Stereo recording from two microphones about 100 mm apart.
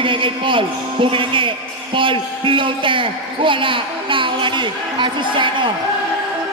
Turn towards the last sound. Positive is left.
turn(degrees=-55)  # may be behind; listen again after turning